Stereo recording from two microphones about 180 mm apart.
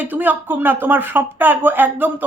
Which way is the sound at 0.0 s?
10° right (ahead or behind).